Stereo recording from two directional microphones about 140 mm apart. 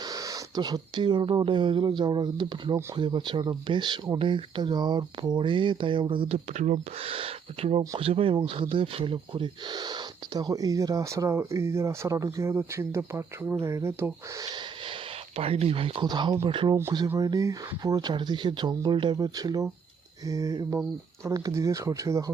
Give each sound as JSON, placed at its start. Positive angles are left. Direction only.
{"t": 0.0, "sound": "speech", "side_deg": -25}
{"t": 15.4, "sound": "speech", "side_deg": -45}
{"t": 17.2, "sound": "speech", "side_deg": -25}